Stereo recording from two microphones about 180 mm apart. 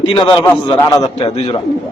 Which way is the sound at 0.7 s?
15° left (ahead or behind).